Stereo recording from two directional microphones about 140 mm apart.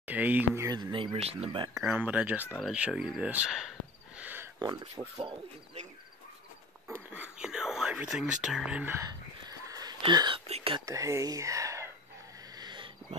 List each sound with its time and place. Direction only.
0.0 s speech: 10° right (ahead or behind)
0.7 s speech: 30° right (ahead or behind)
1.7 s speech: 10° right (ahead or behind)
4.2 s a sound: 15° right (ahead or behind)
4.6 s speech: 25° right (ahead or behind)
6.9 s speech: 10° right (ahead or behind)
9.0 s whispering: 25° right (ahead or behind)
10.4 s speech: 45° right (ahead or behind)
10.9 s speech: 25° right (ahead or behind)
12.5 s a sound: 35° right (ahead or behind)